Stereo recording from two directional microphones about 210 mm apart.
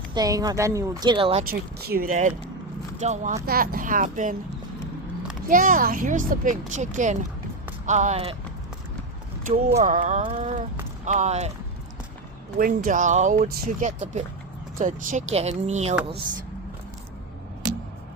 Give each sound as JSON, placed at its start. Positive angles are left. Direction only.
{"t": 0.1, "sound": "speech", "side_deg": -15}
{"t": 1.5, "sound": "speech", "side_deg": -45}
{"t": 3.4, "sound": "speech", "side_deg": -45}
{"t": 5.5, "sound": "speech", "side_deg": -40}
{"t": 9.7, "sound": "speech", "side_deg": -35}
{"t": 12.5, "sound": "speech", "side_deg": -40}